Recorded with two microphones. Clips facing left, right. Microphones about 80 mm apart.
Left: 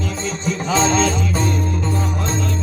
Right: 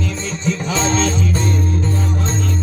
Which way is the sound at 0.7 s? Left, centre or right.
Centre.